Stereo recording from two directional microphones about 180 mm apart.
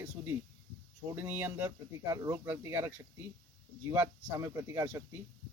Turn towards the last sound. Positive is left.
turn(degrees=-15)  # may be behind; listen again after turning